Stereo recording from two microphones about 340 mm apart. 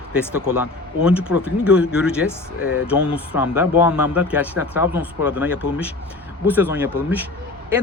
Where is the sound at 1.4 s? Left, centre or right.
Centre.